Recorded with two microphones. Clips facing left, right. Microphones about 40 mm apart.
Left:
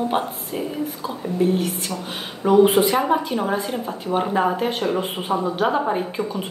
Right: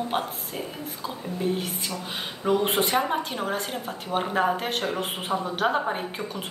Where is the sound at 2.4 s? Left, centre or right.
Centre.